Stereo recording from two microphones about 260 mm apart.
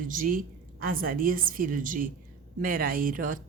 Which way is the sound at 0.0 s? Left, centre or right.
Right.